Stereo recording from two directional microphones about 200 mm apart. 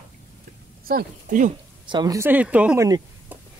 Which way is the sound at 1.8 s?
20° right (ahead or behind).